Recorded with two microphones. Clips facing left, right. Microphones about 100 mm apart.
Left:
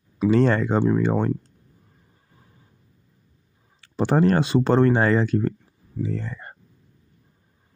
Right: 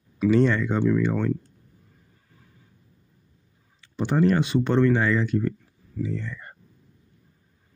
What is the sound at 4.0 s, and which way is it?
Speech, 35° left (ahead or behind).